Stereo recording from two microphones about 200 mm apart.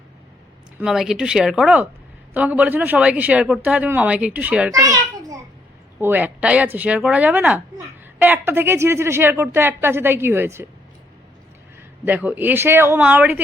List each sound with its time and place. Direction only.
0.8 s speech: centre (ahead or behind)
4.7 s children playing: 15° right (ahead or behind)
6.0 s speech: 10° right (ahead or behind)
11.8 s speech: 10° right (ahead or behind)